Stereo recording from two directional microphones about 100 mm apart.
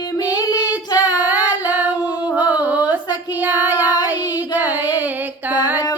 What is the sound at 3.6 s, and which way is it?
Child singing, 20° right (ahead or behind).